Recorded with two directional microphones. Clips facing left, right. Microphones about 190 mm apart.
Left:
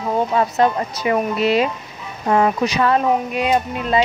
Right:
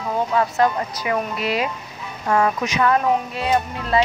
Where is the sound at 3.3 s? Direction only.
15° left (ahead or behind).